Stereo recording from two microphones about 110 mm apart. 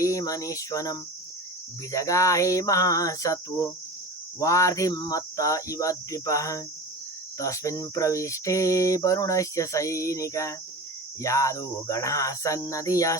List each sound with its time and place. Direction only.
0.0 s cricket: 30° left (ahead or behind)
1.9 s speech: 30° left (ahead or behind)
7.3 s cricket: 30° left (ahead or behind)
11.2 s speech: 30° left (ahead or behind)